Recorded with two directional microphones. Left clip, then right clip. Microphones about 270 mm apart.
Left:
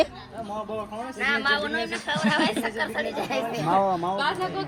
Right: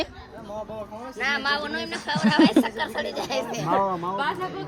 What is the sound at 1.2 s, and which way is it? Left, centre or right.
Speech, right.